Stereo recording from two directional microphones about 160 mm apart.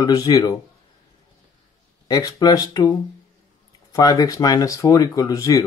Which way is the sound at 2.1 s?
25° left (ahead or behind).